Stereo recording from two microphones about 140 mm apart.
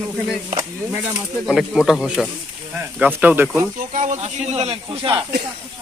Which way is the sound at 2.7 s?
10° right (ahead or behind).